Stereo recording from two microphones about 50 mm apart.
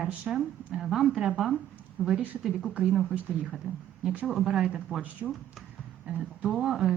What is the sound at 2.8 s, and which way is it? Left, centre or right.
A woman's voice, centre.